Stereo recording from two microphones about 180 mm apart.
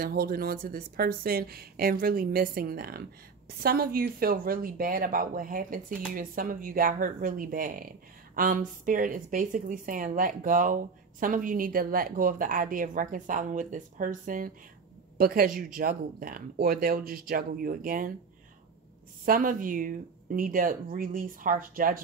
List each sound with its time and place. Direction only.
0.0 s speech: 55° right (ahead or behind)
19.2 s speech: 50° right (ahead or behind)